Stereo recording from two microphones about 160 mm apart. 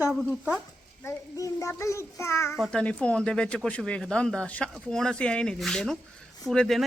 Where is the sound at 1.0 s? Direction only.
20° left (ahead or behind).